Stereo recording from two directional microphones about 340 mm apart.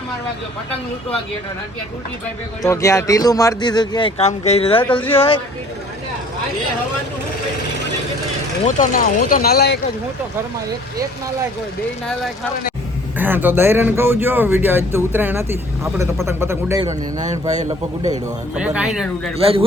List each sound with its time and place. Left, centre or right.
2.6 s speech: centre
8.6 s speech: left
13.1 s speech: centre
18.5 s speech: centre
19.4 s speech: centre